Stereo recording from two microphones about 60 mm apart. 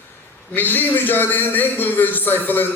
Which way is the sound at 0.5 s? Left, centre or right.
Left.